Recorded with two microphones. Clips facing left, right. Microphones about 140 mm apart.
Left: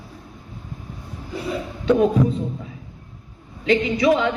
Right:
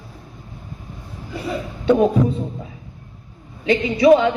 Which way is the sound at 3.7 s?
30° right (ahead or behind).